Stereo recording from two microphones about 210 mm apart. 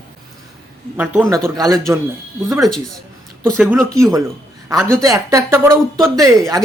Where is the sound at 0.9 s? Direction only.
10° right (ahead or behind).